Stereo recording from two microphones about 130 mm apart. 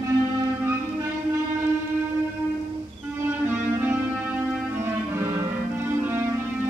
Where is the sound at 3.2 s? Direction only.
15° right (ahead or behind).